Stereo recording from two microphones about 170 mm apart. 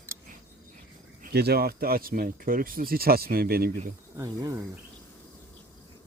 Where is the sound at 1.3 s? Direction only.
70° right (ahead or behind).